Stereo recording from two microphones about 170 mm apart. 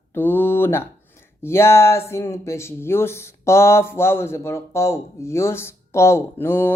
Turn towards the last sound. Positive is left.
turn(degrees=15)  # may be behind; listen again after turning